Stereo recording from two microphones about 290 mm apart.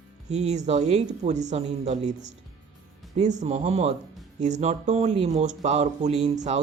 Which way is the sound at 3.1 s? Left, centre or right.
Right.